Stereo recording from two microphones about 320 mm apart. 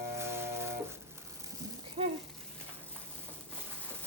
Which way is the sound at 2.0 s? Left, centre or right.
Centre.